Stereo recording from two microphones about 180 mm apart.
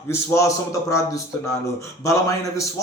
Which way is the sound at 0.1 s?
15° left (ahead or behind).